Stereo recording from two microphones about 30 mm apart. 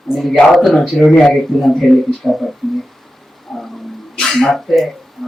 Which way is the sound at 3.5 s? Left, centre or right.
Centre.